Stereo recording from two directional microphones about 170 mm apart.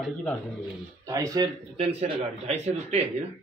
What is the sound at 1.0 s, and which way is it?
Speech, 20° right (ahead or behind).